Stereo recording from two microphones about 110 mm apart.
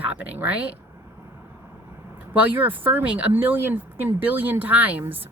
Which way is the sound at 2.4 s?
15° right (ahead or behind).